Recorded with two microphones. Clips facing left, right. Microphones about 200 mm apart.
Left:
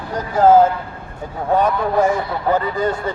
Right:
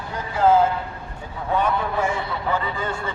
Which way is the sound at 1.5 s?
40° left (ahead or behind).